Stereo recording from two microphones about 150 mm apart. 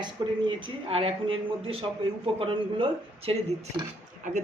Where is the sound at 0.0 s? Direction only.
30° right (ahead or behind).